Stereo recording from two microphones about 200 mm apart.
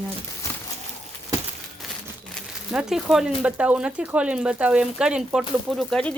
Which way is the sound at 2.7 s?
Centre (ahead or behind).